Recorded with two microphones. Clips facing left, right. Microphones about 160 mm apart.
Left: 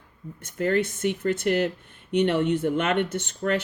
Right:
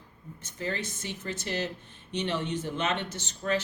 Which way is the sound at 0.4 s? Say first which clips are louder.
Left 11 dB; 55° left (ahead or behind).